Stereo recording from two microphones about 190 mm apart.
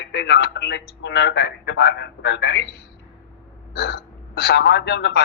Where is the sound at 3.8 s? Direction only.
60° left (ahead or behind).